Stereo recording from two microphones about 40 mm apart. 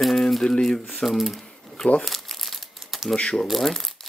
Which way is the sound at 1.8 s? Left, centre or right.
Centre.